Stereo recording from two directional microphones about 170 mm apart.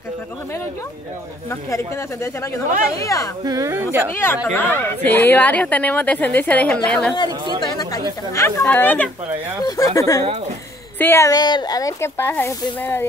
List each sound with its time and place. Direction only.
1.5 s speech: 15° left (ahead or behind)
3.4 s a woman's voice: 20° right (ahead or behind)
4.1 s speech: 15° left (ahead or behind)
7.2 s a woman's voice: 25° right (ahead or behind)
7.6 s speech: 20° left (ahead or behind)